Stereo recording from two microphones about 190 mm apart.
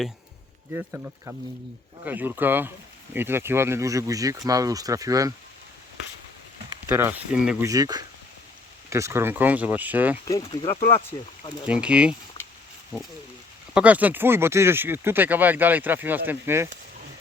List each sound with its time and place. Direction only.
0.7 s speech: 10° right (ahead or behind)
6.8 s speech: 10° right (ahead or behind)
7.7 s speech: 20° right (ahead or behind)
10.2 s speech: 20° left (ahead or behind)
11.6 s speech: 5° right (ahead or behind)